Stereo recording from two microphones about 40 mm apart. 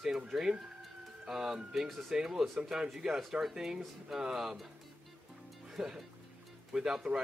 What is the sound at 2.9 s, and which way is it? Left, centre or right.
Speech, centre.